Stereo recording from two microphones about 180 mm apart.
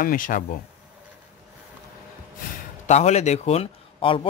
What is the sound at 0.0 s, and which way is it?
Speech, 50° left (ahead or behind).